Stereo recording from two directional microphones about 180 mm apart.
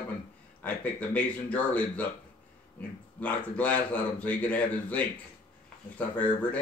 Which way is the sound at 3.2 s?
10° left (ahead or behind).